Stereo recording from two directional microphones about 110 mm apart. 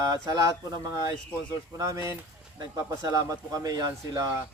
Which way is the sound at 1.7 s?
30° right (ahead or behind).